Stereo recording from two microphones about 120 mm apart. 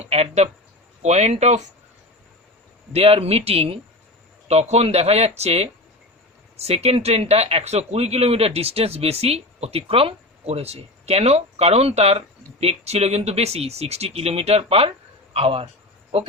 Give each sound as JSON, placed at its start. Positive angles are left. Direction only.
{"t": 0.0, "sound": "speech", "side_deg": -60}
{"t": 1.0, "sound": "speech", "side_deg": -70}
{"t": 2.9, "sound": "speech", "side_deg": -55}